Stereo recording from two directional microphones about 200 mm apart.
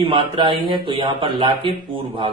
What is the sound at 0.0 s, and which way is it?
Speech, 25° right (ahead or behind).